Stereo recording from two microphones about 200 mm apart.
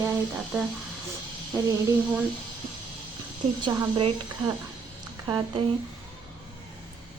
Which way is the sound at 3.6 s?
25° right (ahead or behind).